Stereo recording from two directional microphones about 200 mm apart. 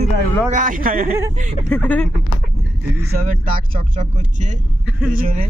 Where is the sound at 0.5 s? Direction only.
40° right (ahead or behind).